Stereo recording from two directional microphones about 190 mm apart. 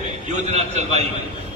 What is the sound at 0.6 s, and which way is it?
Speech, 35° right (ahead or behind).